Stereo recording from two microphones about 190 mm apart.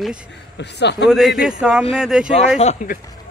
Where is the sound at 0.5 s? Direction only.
65° left (ahead or behind).